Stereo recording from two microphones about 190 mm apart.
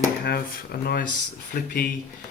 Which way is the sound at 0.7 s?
55° left (ahead or behind).